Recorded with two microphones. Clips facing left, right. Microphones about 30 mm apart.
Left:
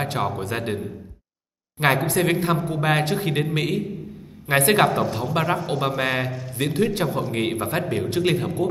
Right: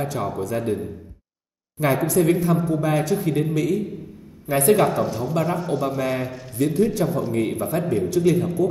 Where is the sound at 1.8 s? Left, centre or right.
Left.